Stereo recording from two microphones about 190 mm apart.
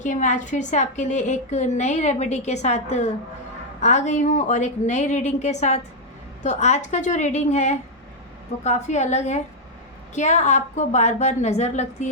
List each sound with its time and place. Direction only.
0.0 s a woman's voice: 40° left (ahead or behind)